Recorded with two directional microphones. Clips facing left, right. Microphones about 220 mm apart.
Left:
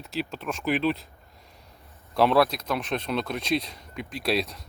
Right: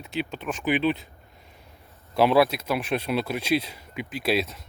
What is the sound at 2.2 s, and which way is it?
Speech, 5° right (ahead or behind).